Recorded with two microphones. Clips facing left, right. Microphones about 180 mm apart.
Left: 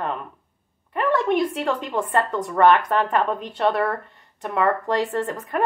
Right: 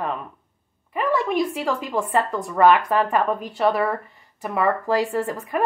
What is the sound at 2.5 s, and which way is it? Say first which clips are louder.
A woman's voice: even; 5° right (ahead or behind).